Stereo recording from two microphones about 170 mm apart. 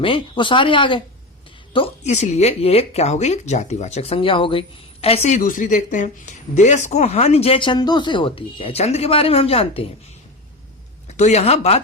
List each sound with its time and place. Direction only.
0.0 s speech: 30° left (ahead or behind)
11.2 s speech: 40° left (ahead or behind)